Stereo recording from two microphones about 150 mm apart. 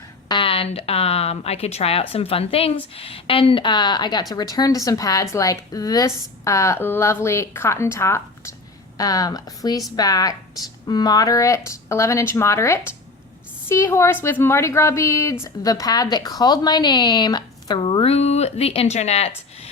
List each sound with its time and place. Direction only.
0.3 s a woman's voice: 35° left (ahead or behind)